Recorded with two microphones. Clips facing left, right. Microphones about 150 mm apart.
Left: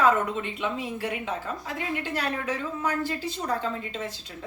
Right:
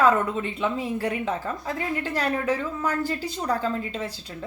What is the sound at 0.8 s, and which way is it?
Speech, 40° right (ahead or behind).